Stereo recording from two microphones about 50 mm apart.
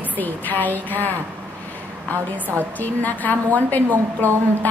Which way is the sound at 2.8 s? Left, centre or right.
Left.